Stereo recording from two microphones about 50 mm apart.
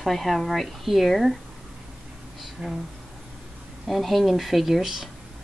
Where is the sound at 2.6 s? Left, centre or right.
Right.